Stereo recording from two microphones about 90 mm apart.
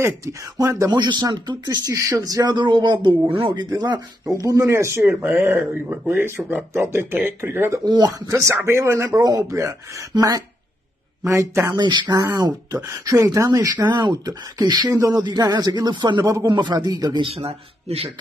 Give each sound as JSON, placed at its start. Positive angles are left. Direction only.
{"t": 0.0, "sound": "speech", "side_deg": -35}
{"t": 0.9, "sound": "speech", "side_deg": -55}
{"t": 2.0, "sound": "speech", "side_deg": -40}
{"t": 3.4, "sound": "speech", "side_deg": -50}
{"t": 7.8, "sound": "speech", "side_deg": -50}
{"t": 11.7, "sound": "speech", "side_deg": -50}
{"t": 15.2, "sound": "speech", "side_deg": -50}
{"t": 17.2, "sound": "a man's voice", "side_deg": -90}